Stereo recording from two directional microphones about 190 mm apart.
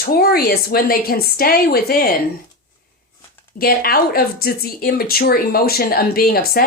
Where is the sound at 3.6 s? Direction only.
50° left (ahead or behind).